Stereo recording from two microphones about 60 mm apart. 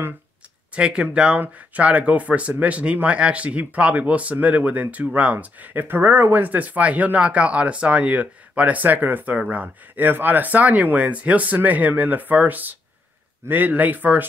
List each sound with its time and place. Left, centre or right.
0.7 s a man's voice: centre